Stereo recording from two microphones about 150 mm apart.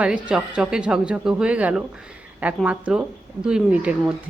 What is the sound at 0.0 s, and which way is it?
A woman's voice, 5° right (ahead or behind).